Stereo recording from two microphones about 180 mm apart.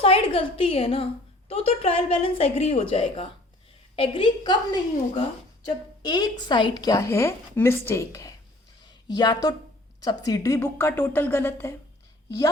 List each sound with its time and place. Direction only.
0.0 s a woman's voice: 30° left (ahead or behind); by 8.3 s 15° left (ahead or behind)
8.8 s a sound: 25° left (ahead or behind)
10.0 s a woman's voice: 20° left (ahead or behind)